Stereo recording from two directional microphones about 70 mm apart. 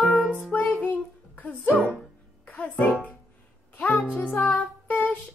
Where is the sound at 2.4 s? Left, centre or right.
Left.